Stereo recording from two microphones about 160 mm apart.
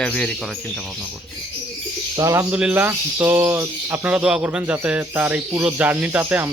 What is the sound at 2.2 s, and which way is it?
Speech, 20° right (ahead or behind).